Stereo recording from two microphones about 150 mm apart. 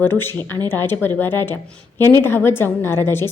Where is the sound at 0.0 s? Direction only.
15° left (ahead or behind).